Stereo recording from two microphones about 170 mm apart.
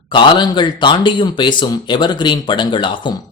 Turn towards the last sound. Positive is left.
turn(degrees=30)  # may be behind; listen again after turning